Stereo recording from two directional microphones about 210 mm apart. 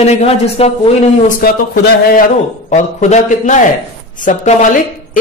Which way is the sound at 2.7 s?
35° left (ahead or behind).